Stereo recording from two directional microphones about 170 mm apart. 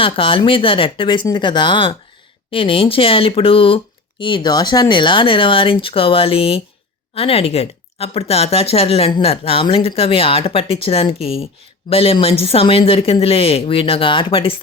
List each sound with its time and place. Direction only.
0.0 s speech: 30° left (ahead or behind)